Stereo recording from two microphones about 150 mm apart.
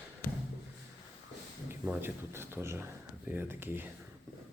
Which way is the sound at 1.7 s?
15° right (ahead or behind).